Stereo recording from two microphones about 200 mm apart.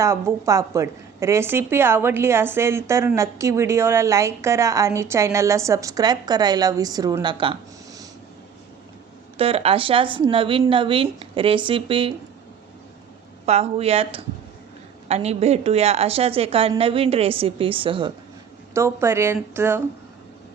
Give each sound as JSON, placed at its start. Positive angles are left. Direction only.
{"t": 0.0, "sound": "a woman's voice", "side_deg": -15}
{"t": 9.4, "sound": "a woman's voice", "side_deg": -30}
{"t": 13.4, "sound": "a woman's voice", "side_deg": -30}
{"t": 18.7, "sound": "a woman's voice", "side_deg": -15}